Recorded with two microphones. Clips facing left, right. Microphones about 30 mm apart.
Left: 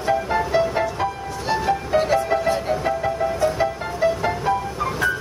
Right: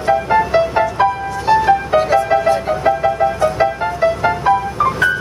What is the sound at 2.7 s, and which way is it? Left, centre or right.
Music, right.